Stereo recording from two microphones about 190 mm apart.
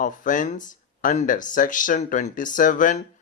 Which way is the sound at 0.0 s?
45° left (ahead or behind).